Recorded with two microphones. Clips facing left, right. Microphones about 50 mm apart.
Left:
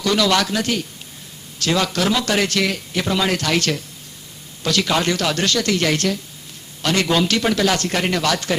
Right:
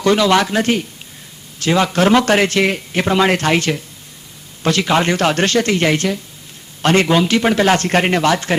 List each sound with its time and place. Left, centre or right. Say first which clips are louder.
0.0 s a man's voice: right 5 dB; right
4.8 s a man's voice: right 4 dB; right
6.8 s a man's voice: right 6 dB; right
7.1 s a man's voice: right 4 dB; centre